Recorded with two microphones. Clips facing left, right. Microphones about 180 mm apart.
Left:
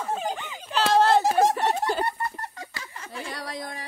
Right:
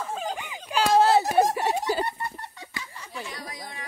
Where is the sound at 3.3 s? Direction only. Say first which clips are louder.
Left 5 dB; 65° left (ahead or behind).